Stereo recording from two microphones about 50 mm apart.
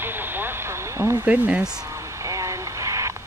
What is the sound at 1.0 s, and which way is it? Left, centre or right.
Speech, right.